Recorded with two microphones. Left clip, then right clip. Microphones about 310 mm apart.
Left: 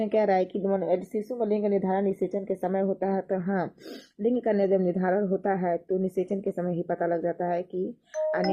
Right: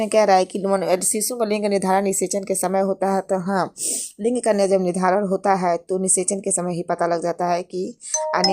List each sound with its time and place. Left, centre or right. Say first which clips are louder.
0.0 s speech: right 8 dB; centre
3.0 s speech: right 7 dB; right
4.2 s speech: right 6 dB; centre